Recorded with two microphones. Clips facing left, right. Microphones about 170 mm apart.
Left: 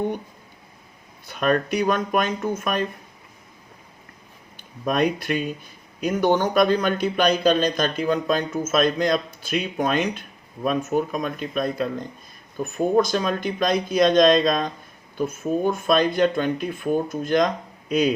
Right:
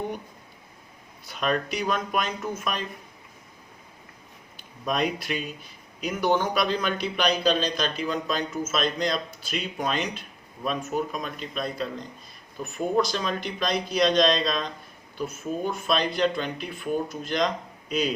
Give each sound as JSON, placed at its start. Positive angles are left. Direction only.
{"t": 1.3, "sound": "a man's voice", "side_deg": 50}
{"t": 4.9, "sound": "a man's voice", "side_deg": 50}